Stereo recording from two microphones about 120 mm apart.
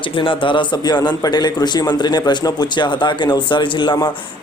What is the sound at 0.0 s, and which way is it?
A man's voice, 45° left (ahead or behind).